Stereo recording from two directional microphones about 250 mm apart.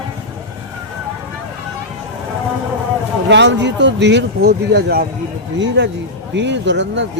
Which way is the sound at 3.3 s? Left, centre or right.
Right.